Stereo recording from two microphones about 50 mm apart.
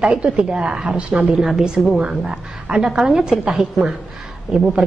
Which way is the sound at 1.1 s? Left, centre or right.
Centre.